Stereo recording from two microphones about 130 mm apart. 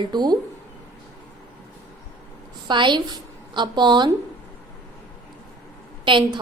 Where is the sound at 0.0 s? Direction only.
35° right (ahead or behind).